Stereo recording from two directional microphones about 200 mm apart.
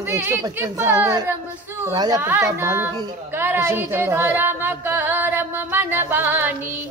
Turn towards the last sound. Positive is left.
turn(degrees=-10)  # may be behind; listen again after turning